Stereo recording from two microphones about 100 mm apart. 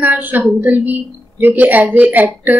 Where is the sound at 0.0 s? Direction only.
20° right (ahead or behind).